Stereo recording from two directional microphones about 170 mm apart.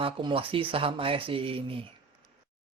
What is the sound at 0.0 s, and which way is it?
Speech, 30° right (ahead or behind).